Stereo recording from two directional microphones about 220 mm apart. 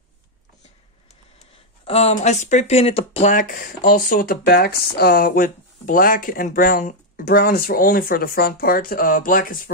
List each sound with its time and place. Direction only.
1.4 s speech: 30° left (ahead or behind)